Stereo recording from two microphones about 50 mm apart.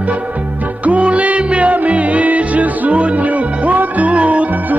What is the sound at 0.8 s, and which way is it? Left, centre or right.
Music, right.